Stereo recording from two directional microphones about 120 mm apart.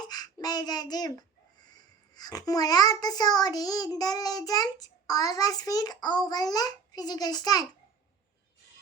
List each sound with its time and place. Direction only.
0.1 s a child's voice: 35° left (ahead or behind)